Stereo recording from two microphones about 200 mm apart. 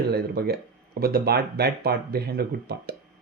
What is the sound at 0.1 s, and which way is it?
Speech, 50° right (ahead or behind).